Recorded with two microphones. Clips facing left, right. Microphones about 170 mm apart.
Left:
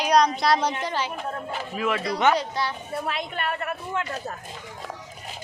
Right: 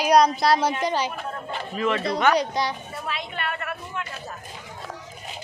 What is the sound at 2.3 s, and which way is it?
Speech, 15° right (ahead or behind).